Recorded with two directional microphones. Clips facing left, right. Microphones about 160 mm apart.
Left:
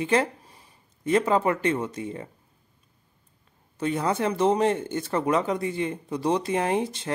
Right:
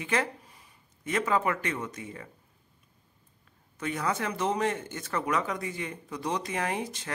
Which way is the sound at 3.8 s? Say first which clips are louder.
Left 6 dB; 30° left (ahead or behind).